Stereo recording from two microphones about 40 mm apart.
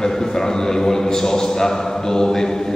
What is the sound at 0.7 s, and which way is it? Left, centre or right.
A man's voice, centre.